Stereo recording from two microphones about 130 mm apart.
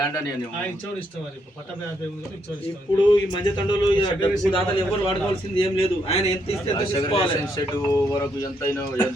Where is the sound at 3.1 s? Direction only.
35° left (ahead or behind).